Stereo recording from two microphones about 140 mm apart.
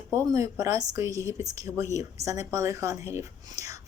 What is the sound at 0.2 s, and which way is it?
Speech, 20° right (ahead or behind).